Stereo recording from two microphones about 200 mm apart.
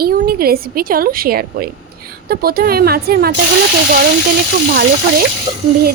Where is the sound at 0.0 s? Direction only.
50° right (ahead or behind).